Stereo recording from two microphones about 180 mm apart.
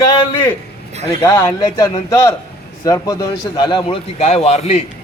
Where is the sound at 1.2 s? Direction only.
20° left (ahead or behind); by 4.9 s 35° left (ahead or behind).